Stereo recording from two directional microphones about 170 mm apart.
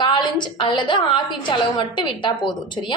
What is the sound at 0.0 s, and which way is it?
A woman's voice, 25° left (ahead or behind).